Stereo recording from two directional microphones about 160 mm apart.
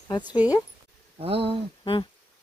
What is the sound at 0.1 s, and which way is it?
Speech, 30° left (ahead or behind).